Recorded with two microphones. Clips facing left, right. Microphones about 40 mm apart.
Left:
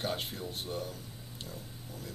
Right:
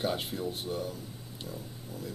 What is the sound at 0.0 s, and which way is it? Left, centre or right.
Speech, centre.